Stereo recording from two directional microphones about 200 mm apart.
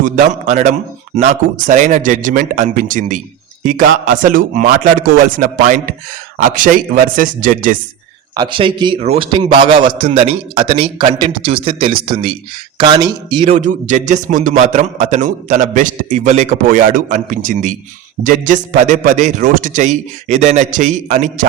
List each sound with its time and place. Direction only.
0.0 s a man's voice: 40° right (ahead or behind)
8.4 s a man's voice: 25° right (ahead or behind)
13.5 s a man's voice: 40° right (ahead or behind)